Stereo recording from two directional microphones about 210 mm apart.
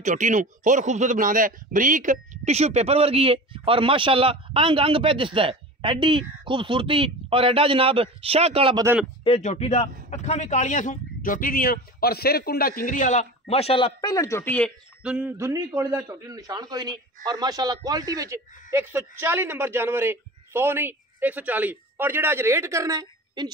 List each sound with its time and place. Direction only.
0.0 s speech: 35° right (ahead or behind)
9.2 s speech: 30° left (ahead or behind); by 14.7 s 10° left (ahead or behind)
15.0 s a man's voice: 5° right (ahead or behind)